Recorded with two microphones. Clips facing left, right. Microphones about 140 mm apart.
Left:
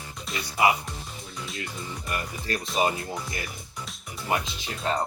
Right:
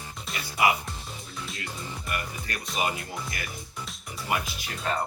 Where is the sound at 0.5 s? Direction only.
25° left (ahead or behind).